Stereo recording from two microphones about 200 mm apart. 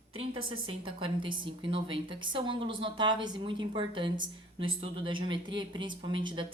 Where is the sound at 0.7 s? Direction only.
25° right (ahead or behind).